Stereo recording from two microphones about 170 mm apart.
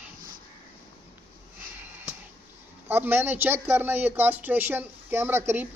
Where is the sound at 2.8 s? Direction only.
15° right (ahead or behind).